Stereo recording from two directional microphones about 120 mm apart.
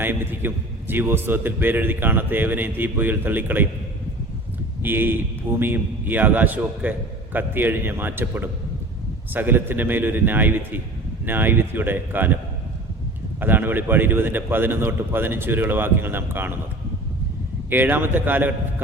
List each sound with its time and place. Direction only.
0.0 s a man's voice: 15° right (ahead or behind)
4.8 s a man's voice: 15° right (ahead or behind)
13.4 s a man's voice: 15° right (ahead or behind)
17.7 s a man's voice: 15° right (ahead or behind)